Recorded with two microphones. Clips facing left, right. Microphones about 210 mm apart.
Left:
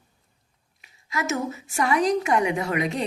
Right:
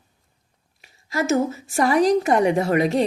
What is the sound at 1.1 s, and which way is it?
A woman's voice, 35° right (ahead or behind).